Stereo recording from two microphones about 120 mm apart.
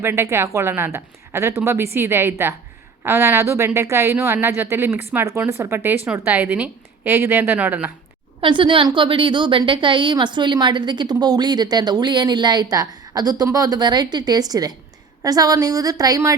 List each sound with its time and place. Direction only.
0.0 s a woman's voice: 20° right (ahead or behind)
8.4 s a woman's voice: 45° right (ahead or behind)